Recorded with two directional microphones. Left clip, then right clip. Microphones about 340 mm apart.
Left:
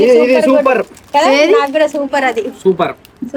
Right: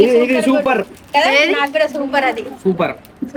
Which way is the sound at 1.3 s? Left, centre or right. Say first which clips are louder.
Left 6 dB; centre.